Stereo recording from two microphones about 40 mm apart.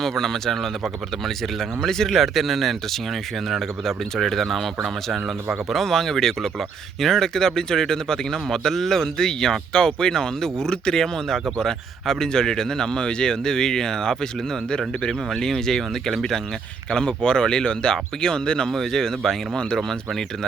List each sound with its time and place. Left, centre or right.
0.0 s a man's voice: centre
16.9 s a man's voice: centre